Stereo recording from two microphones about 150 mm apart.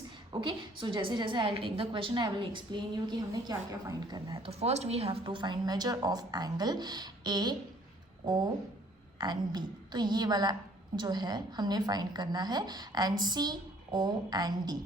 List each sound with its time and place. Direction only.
0.4 s a woman's voice: 35° right (ahead or behind)
4.4 s a woman's voice: 45° right (ahead or behind); by 7.5 s 30° right (ahead or behind)
9.1 s a woman's voice: 30° right (ahead or behind)